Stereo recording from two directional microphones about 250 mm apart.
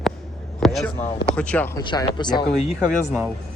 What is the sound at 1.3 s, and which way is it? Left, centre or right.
Speech, centre.